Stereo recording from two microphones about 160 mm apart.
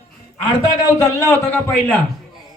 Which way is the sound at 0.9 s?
20° left (ahead or behind).